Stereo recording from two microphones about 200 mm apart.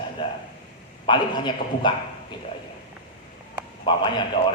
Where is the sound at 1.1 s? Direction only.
25° left (ahead or behind).